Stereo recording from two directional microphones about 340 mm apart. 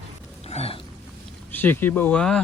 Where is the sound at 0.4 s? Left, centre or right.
Centre.